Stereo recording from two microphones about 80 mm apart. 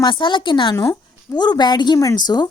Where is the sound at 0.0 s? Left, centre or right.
Left.